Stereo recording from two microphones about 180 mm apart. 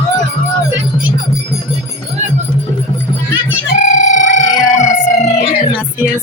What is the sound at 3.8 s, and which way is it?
Music, 45° left (ahead or behind).